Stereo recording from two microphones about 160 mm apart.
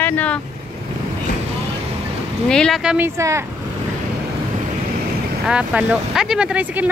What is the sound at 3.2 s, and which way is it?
Speech, 20° right (ahead or behind).